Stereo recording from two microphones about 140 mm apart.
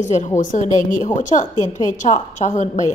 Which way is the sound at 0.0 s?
60° left (ahead or behind).